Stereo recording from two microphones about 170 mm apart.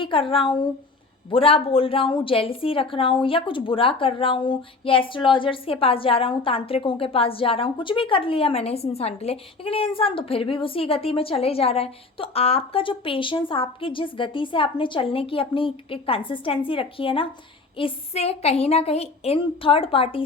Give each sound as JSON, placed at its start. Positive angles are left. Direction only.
{"t": 0.0, "sound": "a woman's voice", "side_deg": 30}